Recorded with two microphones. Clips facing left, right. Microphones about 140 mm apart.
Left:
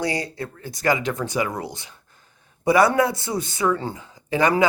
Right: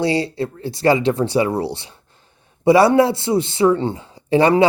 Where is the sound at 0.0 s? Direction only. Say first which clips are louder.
Right 7 dB; 25° right (ahead or behind).